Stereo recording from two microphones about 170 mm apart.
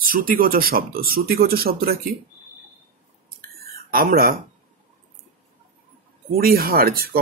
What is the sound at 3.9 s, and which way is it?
Speech, 60° right (ahead or behind).